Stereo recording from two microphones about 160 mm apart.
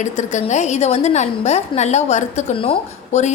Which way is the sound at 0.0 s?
50° left (ahead or behind).